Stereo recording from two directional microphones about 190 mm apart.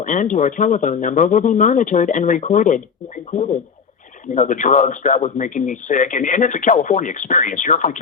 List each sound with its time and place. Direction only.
0.0 s speech: 40° left (ahead or behind)